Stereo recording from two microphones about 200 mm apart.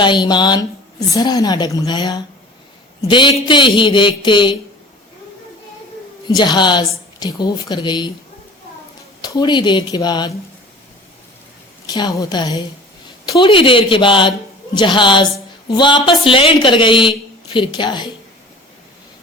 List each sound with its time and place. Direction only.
0.0 s a woman's voice: 20° left (ahead or behind)
6.2 s a woman's voice: 20° left (ahead or behind)
9.2 s a woman's voice: 20° left (ahead or behind)
11.9 s a woman's voice: 20° left (ahead or behind)